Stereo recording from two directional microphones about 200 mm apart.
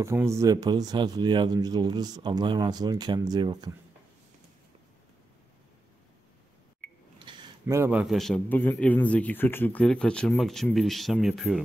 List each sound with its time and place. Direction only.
0.0 s speech: 15° right (ahead or behind)
7.2 s a man's voice: 20° right (ahead or behind); by 11.6 s centre (ahead or behind)